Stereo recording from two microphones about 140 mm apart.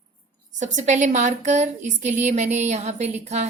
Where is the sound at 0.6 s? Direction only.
60° right (ahead or behind).